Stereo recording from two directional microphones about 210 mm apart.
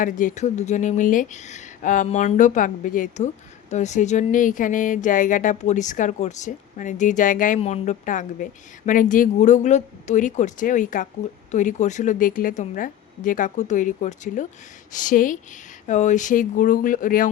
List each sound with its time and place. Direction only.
0.0 s speech: 40° left (ahead or behind)